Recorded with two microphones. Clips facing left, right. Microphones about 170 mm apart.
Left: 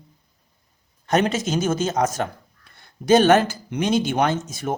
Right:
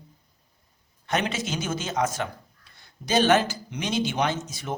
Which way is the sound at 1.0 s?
45° left (ahead or behind).